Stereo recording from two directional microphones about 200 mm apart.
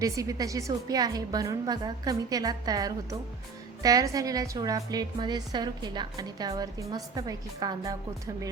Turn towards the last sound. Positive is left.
turn(degrees=-20)  # may be behind; listen again after turning